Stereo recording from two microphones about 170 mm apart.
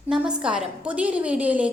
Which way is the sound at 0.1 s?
5° right (ahead or behind).